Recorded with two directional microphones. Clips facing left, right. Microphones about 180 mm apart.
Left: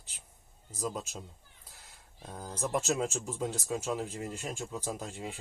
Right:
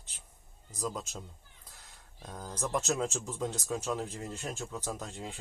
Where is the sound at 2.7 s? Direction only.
Centre (ahead or behind).